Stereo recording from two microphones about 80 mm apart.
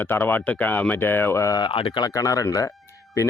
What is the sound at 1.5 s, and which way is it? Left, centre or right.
Speech, left.